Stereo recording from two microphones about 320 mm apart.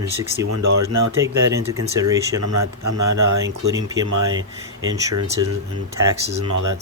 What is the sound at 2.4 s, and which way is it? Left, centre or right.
Speech, right.